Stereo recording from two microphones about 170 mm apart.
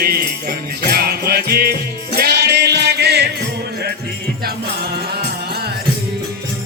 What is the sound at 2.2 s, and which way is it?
Music, 75° right (ahead or behind).